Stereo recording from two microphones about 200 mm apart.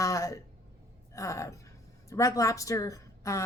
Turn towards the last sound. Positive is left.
turn(degrees=15)  # may be behind; listen again after turning